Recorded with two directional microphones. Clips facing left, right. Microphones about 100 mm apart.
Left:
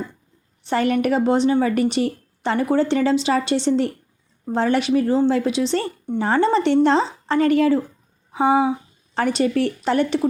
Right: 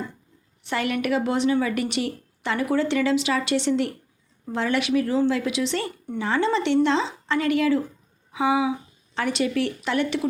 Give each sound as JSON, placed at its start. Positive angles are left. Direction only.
{"t": 0.6, "sound": "a woman's voice", "side_deg": 35}